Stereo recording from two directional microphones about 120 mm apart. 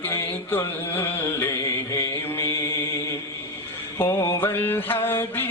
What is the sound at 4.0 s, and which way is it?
Music, 15° left (ahead or behind).